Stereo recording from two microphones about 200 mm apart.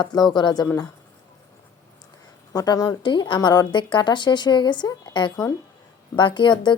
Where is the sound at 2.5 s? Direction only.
20° left (ahead or behind).